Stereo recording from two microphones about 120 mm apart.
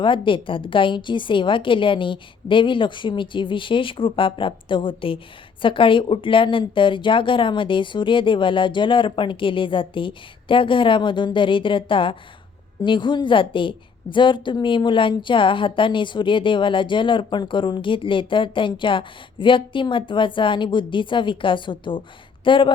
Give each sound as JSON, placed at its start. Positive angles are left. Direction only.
{"t": 0.0, "sound": "a woman's voice", "side_deg": 45}